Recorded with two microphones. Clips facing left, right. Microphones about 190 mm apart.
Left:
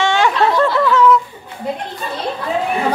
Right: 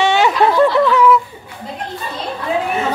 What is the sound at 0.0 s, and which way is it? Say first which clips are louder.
Snicker: right 2 dB; 20° right (ahead or behind).